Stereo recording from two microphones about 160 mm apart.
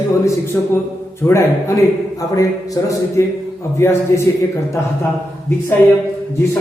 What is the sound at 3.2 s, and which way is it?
A woman's voice, 20° left (ahead or behind).